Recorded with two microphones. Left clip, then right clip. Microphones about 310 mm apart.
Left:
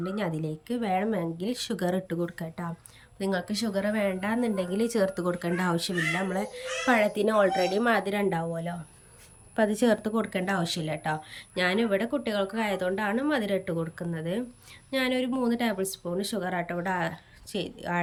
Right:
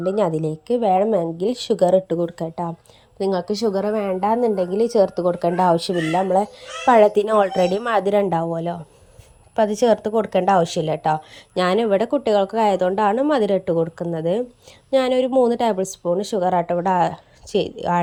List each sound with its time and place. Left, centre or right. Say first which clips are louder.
0.0 s speech: right 12 dB; centre